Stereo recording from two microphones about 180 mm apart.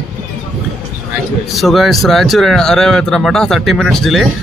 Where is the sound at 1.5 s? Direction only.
Centre (ahead or behind).